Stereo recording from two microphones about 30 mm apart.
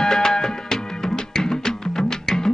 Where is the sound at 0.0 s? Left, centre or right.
Left.